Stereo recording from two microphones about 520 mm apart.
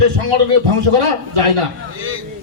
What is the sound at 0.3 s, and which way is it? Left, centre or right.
Speech, right.